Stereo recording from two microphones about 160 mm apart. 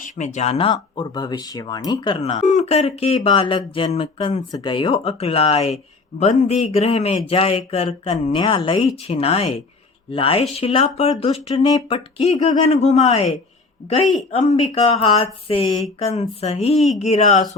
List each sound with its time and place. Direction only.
0.0 s speech: 50° left (ahead or behind)
14.3 s speech: 40° left (ahead or behind)
16.7 s speech: centre (ahead or behind)
17.0 s speech: 45° left (ahead or behind)